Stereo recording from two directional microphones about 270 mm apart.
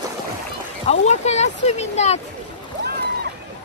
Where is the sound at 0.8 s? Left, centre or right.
Left.